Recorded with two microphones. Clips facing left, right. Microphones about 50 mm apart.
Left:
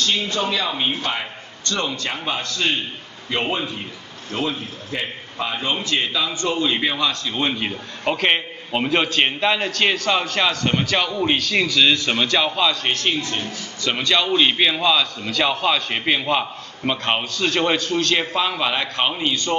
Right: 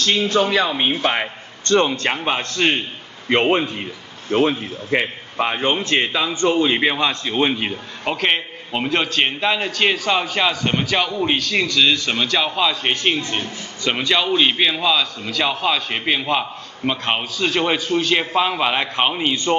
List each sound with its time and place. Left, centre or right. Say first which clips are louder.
0.3 s a man's voice: right 5 dB; right; by 7.8 s centre
8.0 s a man's voice: left 1 dB; centre
12.9 s a man's voice: right 2 dB; right